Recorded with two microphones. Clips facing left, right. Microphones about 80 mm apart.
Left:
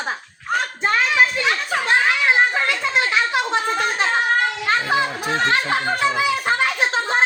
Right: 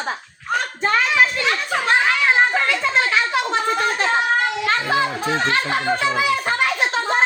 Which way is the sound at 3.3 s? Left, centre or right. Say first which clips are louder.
Right 1 dB; centre.